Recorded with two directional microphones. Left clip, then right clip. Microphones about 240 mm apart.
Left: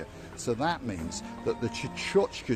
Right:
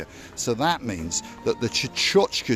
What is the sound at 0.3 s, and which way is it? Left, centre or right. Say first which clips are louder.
Speech: right 6 dB; right.